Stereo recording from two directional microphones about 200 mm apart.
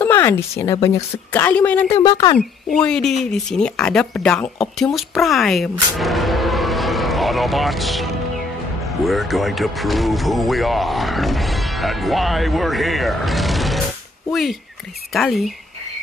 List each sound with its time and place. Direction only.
0.0 s a woman's voice: 10° left (ahead or behind)
1.9 s speech: 25° left (ahead or behind)
2.3 s speech: 5° left (ahead or behind)